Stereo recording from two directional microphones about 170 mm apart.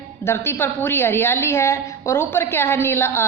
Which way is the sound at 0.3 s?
15° left (ahead or behind).